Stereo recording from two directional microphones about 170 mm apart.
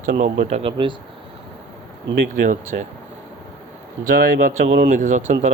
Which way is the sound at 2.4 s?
50° right (ahead or behind).